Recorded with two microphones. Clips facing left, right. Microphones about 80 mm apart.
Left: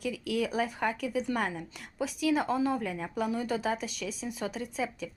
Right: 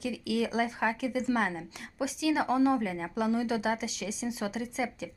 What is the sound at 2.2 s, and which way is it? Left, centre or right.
Speech, centre.